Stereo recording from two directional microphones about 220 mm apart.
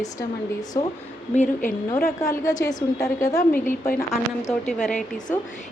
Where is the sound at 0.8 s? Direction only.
15° left (ahead or behind).